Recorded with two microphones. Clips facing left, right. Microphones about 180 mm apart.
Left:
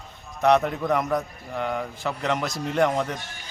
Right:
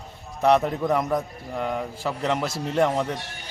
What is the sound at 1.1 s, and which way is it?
A man's voice, 5° right (ahead or behind).